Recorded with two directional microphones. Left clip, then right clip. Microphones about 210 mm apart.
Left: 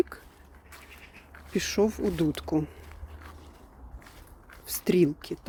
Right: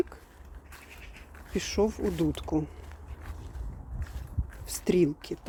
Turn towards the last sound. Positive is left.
turn(degrees=15)  # may be behind; listen again after turning